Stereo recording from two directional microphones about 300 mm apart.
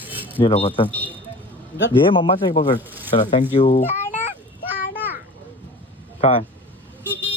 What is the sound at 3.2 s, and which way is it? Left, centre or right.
Speech, centre.